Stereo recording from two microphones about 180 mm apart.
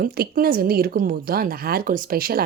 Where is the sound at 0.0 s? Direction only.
55° right (ahead or behind).